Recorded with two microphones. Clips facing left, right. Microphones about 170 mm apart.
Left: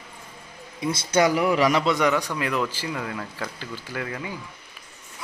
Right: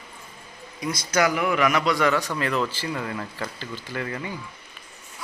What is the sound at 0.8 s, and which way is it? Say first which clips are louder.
Speech: left 2 dB; 25° left (ahead or behind).